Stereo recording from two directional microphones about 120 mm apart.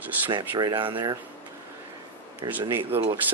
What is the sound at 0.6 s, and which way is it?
Speech, 40° right (ahead or behind).